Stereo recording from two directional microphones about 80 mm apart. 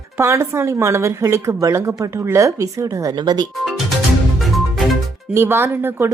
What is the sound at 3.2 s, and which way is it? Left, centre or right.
Speech, right.